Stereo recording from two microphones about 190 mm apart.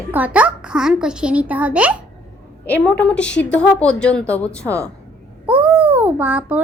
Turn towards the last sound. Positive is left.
turn(degrees=-10)  # may be behind; listen again after turning